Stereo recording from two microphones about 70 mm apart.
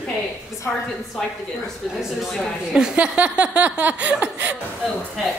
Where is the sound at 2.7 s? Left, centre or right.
Centre.